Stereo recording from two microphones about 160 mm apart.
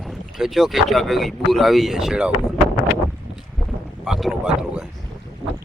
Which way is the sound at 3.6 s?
5° right (ahead or behind).